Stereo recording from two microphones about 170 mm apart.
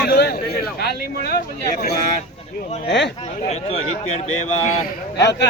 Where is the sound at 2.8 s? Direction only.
90° left.